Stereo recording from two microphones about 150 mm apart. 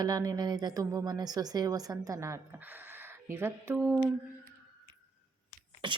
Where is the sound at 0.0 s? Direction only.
25° right (ahead or behind).